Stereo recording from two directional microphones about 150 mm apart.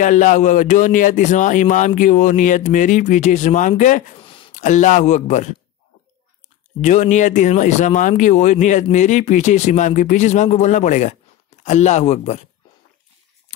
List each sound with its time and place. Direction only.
0.0 s a man's voice: 55° left (ahead or behind)
4.2 s a sound: 35° left (ahead or behind)
4.6 s a man's voice: 55° left (ahead or behind)
6.8 s a man's voice: 55° left (ahead or behind)